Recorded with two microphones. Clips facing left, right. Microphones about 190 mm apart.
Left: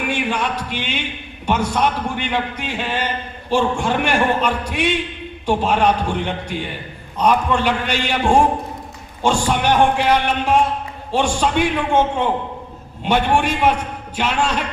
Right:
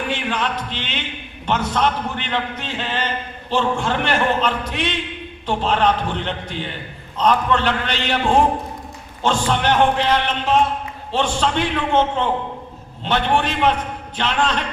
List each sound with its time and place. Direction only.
0.1 s a man's voice: 10° left (ahead or behind)